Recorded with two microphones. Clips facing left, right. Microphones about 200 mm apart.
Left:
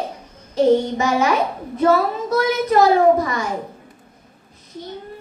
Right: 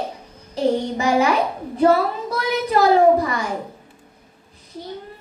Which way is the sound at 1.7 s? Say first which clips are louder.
Even; 35° right (ahead or behind).